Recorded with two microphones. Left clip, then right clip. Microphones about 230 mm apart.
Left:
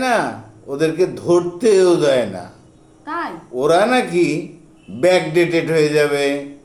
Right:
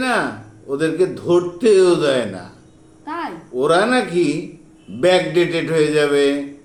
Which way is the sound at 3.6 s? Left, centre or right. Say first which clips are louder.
Left 1 dB; left.